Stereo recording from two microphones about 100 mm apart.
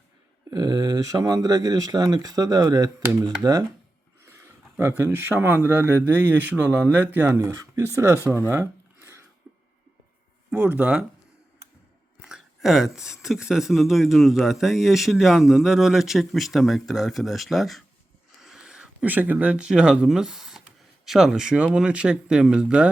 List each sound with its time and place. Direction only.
0.5 s speech: 40° right (ahead or behind)
4.3 s speech: 25° right (ahead or behind)
8.3 s a sound: 20° right (ahead or behind)
10.5 s speech: 10° right (ahead or behind)
12.2 s speech: 5° right (ahead or behind)